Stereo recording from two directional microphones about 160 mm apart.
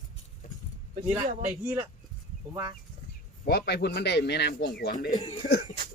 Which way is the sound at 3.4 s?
90° left.